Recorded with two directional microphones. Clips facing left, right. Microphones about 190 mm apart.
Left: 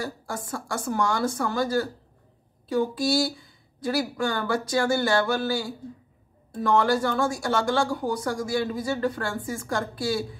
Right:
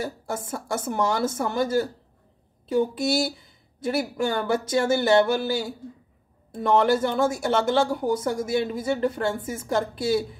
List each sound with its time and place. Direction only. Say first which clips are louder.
0.0 s speech: right 2 dB; 25° right (ahead or behind)